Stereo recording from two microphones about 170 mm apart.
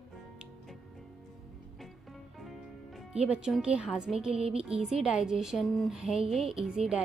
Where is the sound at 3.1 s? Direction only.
5° right (ahead or behind).